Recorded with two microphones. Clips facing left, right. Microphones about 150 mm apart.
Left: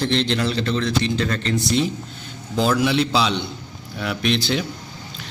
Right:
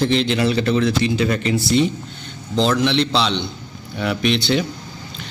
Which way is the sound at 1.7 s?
Centre (ahead or behind).